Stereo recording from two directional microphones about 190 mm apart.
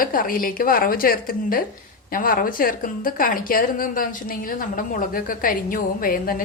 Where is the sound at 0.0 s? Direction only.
45° left (ahead or behind).